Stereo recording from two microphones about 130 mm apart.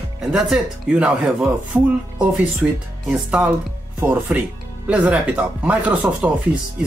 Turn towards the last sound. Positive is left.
turn(degrees=-10)  # may be behind; listen again after turning